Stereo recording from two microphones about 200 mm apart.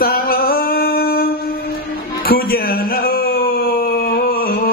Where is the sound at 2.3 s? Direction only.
45° left (ahead or behind).